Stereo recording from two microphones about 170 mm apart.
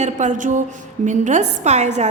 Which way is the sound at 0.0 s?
45° right (ahead or behind).